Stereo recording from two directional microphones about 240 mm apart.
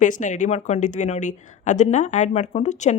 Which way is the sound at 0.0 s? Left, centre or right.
Left.